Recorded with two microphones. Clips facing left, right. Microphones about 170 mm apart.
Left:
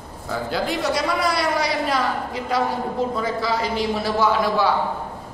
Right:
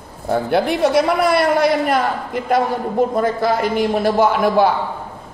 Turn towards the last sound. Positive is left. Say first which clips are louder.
# right 5 dB
turn(degrees=-55)  # may be behind; listen again after turning